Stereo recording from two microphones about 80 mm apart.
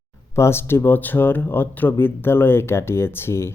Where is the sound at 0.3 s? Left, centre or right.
Left.